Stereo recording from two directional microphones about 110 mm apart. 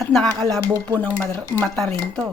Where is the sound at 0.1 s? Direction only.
5° left (ahead or behind).